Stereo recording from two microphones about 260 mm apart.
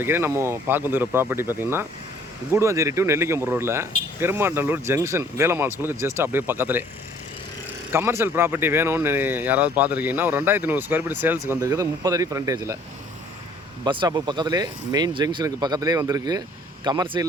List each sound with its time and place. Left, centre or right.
0.0 s speech: centre
7.9 s speech: centre
13.8 s speech: centre